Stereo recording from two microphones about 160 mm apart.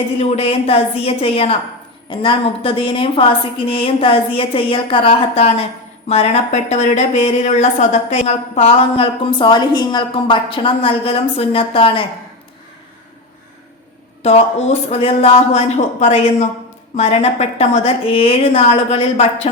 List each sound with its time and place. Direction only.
0.2 s speech: 40° left (ahead or behind)
14.2 s speech: 40° left (ahead or behind)